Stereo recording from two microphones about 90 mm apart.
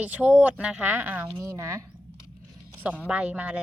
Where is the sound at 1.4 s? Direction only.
35° right (ahead or behind).